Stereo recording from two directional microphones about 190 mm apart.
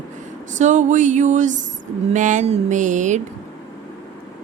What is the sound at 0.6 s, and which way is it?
A woman's voice, 40° right (ahead or behind).